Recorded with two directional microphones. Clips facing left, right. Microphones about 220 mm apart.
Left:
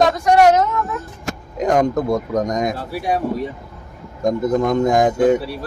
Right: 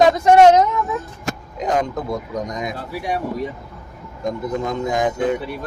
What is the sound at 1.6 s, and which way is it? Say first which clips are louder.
Speech: left 5 dB; 45° left (ahead or behind).